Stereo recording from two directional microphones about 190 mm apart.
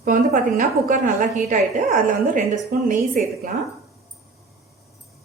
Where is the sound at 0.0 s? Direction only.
45° right (ahead or behind).